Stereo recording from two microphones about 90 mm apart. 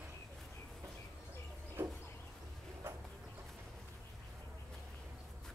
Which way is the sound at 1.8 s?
25° right (ahead or behind).